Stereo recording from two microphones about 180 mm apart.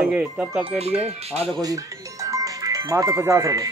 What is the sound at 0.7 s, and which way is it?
Speech, 35° right (ahead or behind).